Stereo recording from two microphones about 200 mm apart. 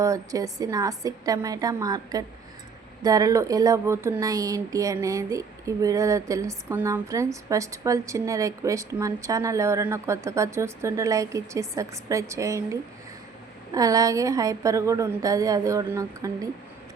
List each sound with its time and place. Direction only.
0.0 s speech: 15° right (ahead or behind)